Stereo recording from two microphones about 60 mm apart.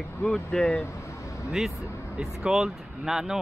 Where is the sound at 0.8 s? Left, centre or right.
Left.